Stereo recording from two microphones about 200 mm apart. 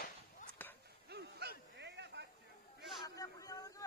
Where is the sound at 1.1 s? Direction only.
55° right (ahead or behind).